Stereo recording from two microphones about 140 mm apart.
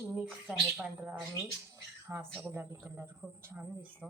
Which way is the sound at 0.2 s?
5° right (ahead or behind).